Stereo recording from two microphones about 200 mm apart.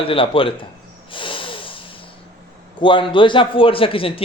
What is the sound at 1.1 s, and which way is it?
Snort, 25° left (ahead or behind).